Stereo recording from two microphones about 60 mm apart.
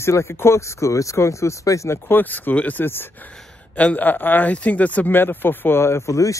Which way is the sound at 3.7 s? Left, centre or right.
Left.